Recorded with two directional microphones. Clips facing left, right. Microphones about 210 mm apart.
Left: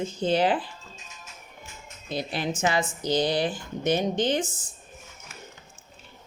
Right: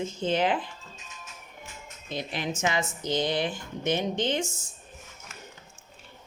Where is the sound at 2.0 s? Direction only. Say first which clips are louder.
Left 3 dB; 35° left (ahead or behind).